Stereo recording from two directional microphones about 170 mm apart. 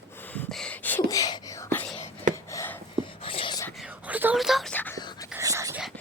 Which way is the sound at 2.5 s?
15° left (ahead or behind).